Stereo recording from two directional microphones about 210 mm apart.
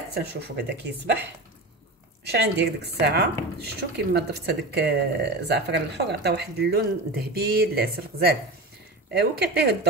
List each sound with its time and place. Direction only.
0.1 s speech: 55° right (ahead or behind)
2.2 s speech: 50° right (ahead or behind)